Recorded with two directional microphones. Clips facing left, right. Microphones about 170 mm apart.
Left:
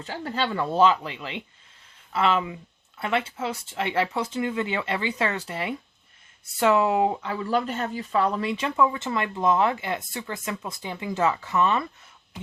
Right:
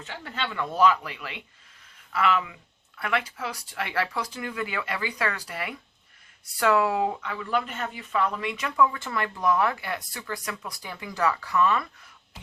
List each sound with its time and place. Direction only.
0.0 s speech: 35° left (ahead or behind)